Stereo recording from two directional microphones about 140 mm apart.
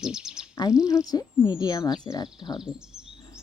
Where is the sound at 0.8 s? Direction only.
25° left (ahead or behind).